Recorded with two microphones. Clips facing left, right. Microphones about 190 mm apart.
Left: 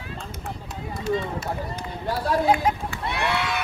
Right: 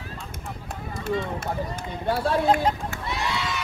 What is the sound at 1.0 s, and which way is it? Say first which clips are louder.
Speech: left 1 dB; 55° right (ahead or behind).